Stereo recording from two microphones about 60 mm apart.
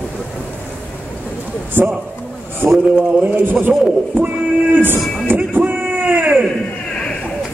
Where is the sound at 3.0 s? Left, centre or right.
Right.